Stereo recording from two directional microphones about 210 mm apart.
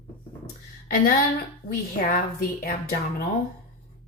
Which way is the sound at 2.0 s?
45° left (ahead or behind).